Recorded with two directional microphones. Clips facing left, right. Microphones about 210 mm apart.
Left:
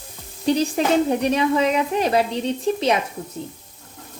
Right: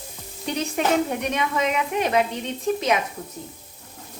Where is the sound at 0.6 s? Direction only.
35° left (ahead or behind).